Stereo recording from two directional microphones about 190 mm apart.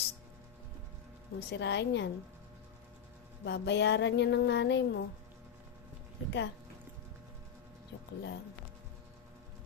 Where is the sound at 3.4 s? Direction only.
65° left (ahead or behind).